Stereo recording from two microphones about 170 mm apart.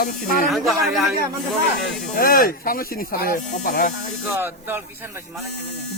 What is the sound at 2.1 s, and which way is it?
Speech, 55° left (ahead or behind).